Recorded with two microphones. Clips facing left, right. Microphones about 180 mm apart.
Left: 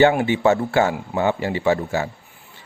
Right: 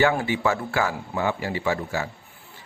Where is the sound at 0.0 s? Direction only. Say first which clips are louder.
Left 6 dB; 25° left (ahead or behind).